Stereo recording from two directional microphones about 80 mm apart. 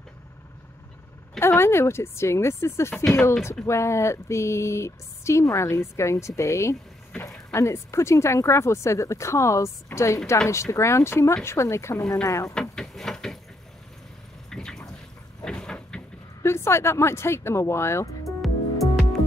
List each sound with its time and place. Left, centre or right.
1.4 s speech: left
12.5 s a sound: centre
14.5 s a sound: centre
15.4 s vehicle: centre
16.4 s speech: left
18.2 s music: centre